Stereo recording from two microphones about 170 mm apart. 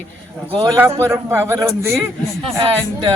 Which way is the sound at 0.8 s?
15° right (ahead or behind).